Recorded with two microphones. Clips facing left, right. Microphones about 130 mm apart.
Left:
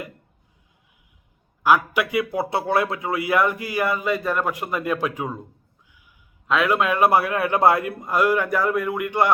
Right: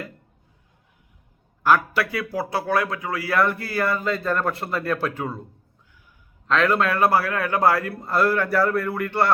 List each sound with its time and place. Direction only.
1.6 s a man's voice: 15° left (ahead or behind)
6.5 s a man's voice: 10° left (ahead or behind)